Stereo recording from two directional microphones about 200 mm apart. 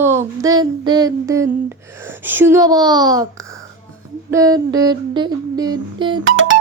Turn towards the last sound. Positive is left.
turn(degrees=-75)  # may be behind; listen again after turning